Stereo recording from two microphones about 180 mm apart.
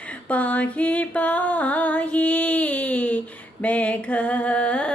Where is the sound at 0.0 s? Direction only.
5° left (ahead or behind).